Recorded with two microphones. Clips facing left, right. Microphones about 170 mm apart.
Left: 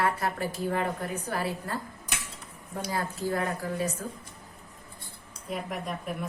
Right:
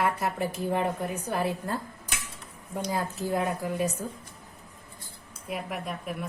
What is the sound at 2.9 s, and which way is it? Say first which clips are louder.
Speech: right 1 dB; 15° right (ahead or behind).